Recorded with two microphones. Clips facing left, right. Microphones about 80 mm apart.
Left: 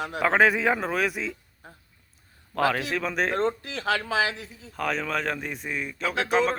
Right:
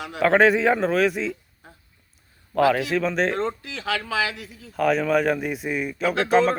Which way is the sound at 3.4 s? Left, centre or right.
Left.